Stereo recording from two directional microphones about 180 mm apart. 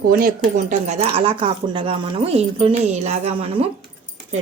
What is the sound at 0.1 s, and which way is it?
Speech, 55° right (ahead or behind).